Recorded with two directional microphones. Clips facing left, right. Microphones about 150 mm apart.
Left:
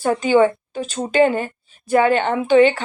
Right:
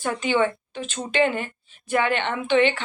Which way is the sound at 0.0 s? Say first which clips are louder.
Left 7 dB; 40° left (ahead or behind).